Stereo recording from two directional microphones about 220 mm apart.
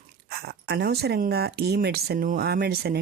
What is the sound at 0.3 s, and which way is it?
Speech, 45° right (ahead or behind).